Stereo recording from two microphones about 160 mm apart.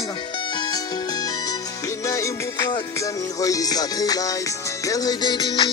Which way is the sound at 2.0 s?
20° left (ahead or behind).